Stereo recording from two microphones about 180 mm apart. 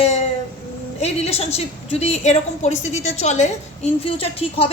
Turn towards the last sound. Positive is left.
turn(degrees=35)  # may be behind; listen again after turning